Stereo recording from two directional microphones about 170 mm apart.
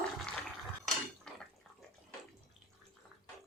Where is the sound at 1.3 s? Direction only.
5° left (ahead or behind).